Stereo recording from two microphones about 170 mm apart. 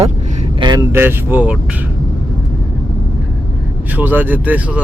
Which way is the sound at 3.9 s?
10° right (ahead or behind).